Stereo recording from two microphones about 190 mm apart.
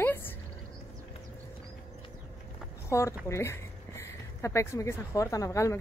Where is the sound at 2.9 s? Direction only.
15° left (ahead or behind).